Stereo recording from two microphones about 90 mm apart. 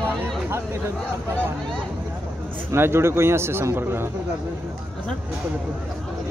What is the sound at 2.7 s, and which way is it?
Speech, 30° right (ahead or behind).